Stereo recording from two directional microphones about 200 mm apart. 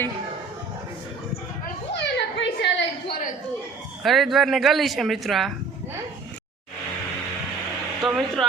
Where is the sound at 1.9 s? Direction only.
60° left (ahead or behind).